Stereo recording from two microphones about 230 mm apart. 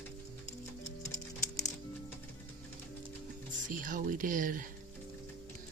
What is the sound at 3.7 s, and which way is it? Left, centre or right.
Speech, right.